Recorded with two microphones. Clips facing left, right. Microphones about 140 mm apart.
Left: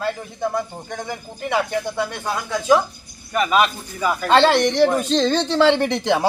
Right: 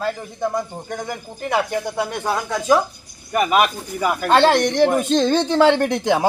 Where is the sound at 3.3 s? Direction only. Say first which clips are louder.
Right 1 dB; 10° right (ahead or behind).